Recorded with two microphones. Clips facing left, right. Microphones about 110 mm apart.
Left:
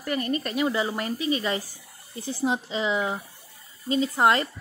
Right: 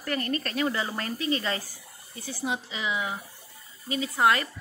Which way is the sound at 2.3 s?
30° left (ahead or behind).